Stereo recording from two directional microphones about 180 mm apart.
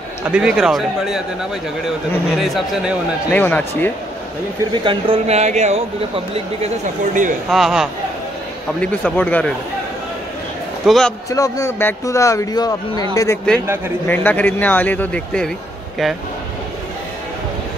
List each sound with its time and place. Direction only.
0.3 s speech: 5° right (ahead or behind)
2.3 s speech: centre (ahead or behind)
4.8 s speech: 30° right (ahead or behind)
7.4 s speech: centre (ahead or behind)
8.8 s speech: 10° left (ahead or behind)
10.9 s speech: 5° left (ahead or behind)
11.2 s speech: 20° left (ahead or behind)